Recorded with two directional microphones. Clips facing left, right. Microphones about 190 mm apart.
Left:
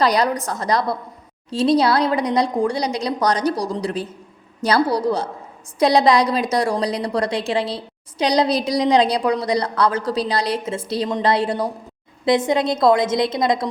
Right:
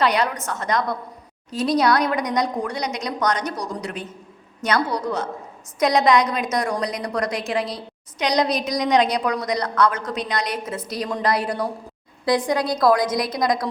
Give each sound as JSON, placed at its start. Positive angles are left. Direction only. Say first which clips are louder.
{"t": 0.0, "sound": "a woman's voice", "louder": "left 3 dB", "side_deg": 35}